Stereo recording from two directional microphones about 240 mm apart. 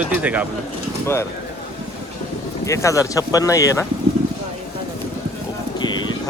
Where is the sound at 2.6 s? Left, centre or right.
Centre.